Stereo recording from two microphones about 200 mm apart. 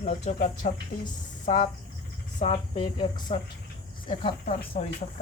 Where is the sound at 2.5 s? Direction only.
25° left (ahead or behind).